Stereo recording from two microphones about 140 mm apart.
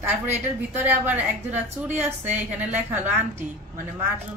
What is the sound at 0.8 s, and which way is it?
Speech, 15° right (ahead or behind).